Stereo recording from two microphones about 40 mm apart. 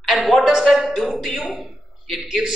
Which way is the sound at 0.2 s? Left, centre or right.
Centre.